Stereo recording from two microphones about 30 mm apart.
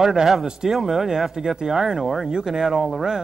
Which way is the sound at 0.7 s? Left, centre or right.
Centre.